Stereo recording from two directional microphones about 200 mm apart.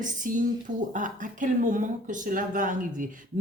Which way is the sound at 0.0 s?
40° right (ahead or behind).